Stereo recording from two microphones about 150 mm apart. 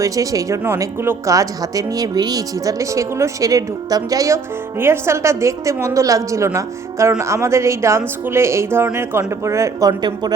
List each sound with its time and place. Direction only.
0.0 s speech: 20° right (ahead or behind)